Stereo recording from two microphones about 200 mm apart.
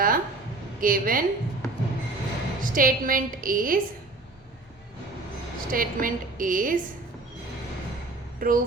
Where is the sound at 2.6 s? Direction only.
45° right (ahead or behind).